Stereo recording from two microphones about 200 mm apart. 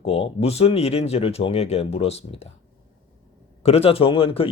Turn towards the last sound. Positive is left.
turn(degrees=25)  # may be behind; listen again after turning